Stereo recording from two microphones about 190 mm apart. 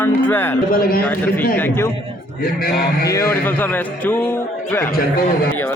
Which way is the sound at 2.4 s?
50° left (ahead or behind).